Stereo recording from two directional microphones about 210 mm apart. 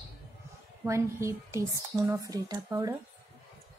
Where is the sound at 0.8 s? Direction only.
15° right (ahead or behind).